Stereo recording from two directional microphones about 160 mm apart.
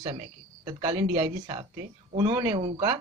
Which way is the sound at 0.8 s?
35° right (ahead or behind).